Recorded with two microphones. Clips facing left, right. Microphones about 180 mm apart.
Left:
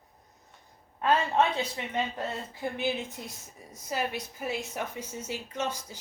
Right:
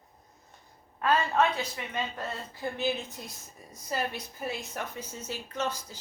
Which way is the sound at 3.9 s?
15° left (ahead or behind).